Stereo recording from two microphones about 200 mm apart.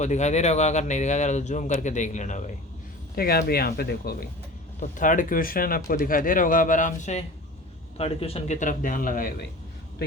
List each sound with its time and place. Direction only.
0.0 s speech: 35° left (ahead or behind)
3.2 s speech: 50° left (ahead or behind)